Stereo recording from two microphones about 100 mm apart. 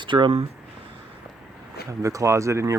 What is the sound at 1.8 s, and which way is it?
Speech, 30° right (ahead or behind).